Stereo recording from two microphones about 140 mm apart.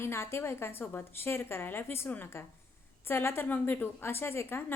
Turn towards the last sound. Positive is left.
turn(degrees=15)  # may be behind; listen again after turning